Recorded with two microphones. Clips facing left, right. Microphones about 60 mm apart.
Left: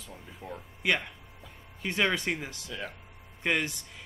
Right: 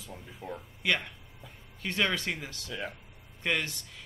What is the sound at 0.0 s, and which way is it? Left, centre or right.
Speech, centre.